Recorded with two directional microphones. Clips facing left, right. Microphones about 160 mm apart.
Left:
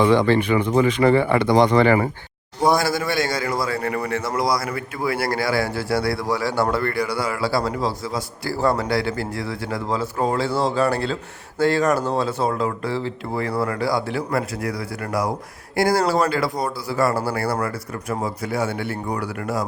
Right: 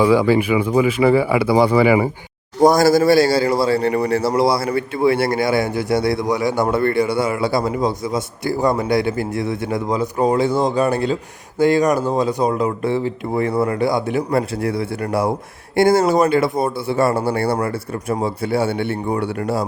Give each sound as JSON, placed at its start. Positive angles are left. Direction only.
{"t": 0.0, "sound": "speech", "side_deg": -10}
{"t": 2.6, "sound": "a man's voice", "side_deg": -40}